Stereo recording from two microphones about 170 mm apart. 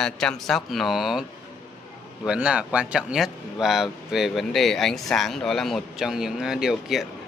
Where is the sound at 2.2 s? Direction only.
5° right (ahead or behind).